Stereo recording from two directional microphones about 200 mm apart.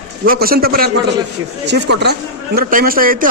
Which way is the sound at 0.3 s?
50° right (ahead or behind).